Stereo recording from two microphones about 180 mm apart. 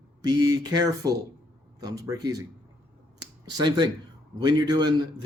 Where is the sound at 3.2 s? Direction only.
20° right (ahead or behind).